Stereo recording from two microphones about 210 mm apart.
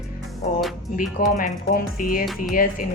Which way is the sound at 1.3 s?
40° left (ahead or behind).